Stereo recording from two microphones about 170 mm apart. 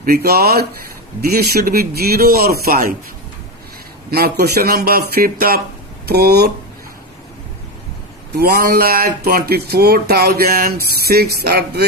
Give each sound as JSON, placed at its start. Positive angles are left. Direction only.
{"t": 0.0, "sound": "speech", "side_deg": -65}
{"t": 4.1, "sound": "speech", "side_deg": -65}
{"t": 8.3, "sound": "speech", "side_deg": -65}